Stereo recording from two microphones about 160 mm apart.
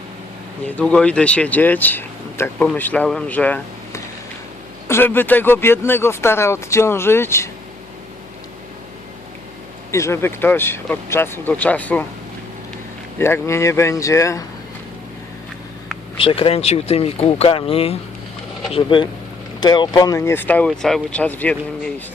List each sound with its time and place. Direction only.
0.6 s speech: 10° left (ahead or behind)
9.9 s speech: 15° left (ahead or behind)
13.1 s speech: 15° left (ahead or behind)
16.1 s speech: 35° left (ahead or behind); by 22.0 s 10° left (ahead or behind)